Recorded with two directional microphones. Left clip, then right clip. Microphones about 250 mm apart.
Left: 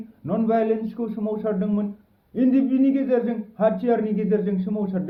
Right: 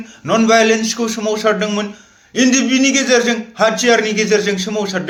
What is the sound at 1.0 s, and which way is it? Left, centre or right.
Speech, right.